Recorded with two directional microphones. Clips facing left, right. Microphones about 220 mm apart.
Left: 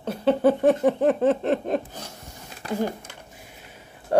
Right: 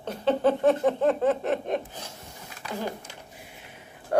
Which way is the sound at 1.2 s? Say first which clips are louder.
Left 3 dB; 30° left (ahead or behind).